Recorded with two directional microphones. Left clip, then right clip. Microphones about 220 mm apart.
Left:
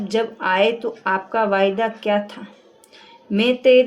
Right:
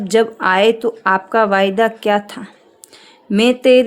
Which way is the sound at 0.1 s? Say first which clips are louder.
Right 6 dB; 50° right (ahead or behind).